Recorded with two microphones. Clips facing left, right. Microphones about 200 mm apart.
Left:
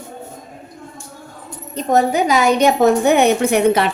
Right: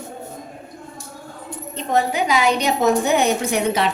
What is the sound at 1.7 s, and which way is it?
A woman's voice, 45° left (ahead or behind).